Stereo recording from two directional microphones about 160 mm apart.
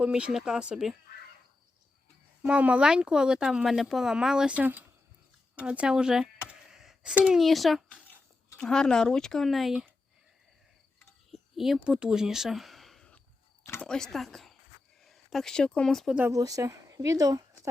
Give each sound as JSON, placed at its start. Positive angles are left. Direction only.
{"t": 0.0, "sound": "speech", "side_deg": -5}
{"t": 2.4, "sound": "speech", "side_deg": -5}
{"t": 11.0, "sound": "a sound", "side_deg": 0}
{"t": 13.8, "sound": "speech", "side_deg": 5}
{"t": 16.1, "sound": "speech", "side_deg": -15}